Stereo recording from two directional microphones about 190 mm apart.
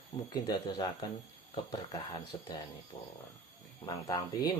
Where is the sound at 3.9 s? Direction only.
20° left (ahead or behind).